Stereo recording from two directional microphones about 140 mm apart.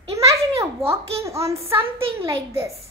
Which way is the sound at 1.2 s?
20° right (ahead or behind).